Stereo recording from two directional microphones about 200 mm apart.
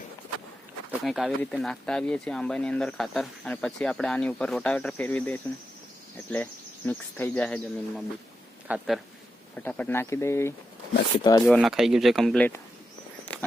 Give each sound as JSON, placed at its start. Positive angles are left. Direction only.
{"t": 0.9, "sound": "speech", "side_deg": 0}
{"t": 8.6, "sound": "speech", "side_deg": -5}
{"t": 9.6, "sound": "speech", "side_deg": 5}
{"t": 11.4, "sound": "speech", "side_deg": 0}
{"t": 13.3, "sound": "a sound", "side_deg": 5}